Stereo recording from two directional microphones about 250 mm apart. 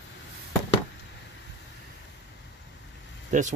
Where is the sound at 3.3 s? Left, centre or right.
Right.